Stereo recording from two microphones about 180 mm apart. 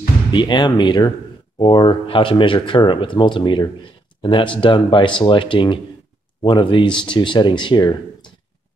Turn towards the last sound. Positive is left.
turn(degrees=25)  # may be behind; listen again after turning